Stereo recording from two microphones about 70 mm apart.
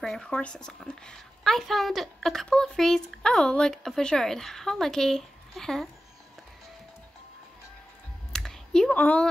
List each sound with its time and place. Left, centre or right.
0.0 s speech: centre
0.3 s speech: centre
8.3 s computer keyboard: centre
8.9 s a woman's voice: left